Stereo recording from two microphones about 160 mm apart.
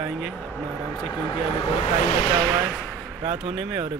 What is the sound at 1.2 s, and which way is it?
Speech, 30° left (ahead or behind).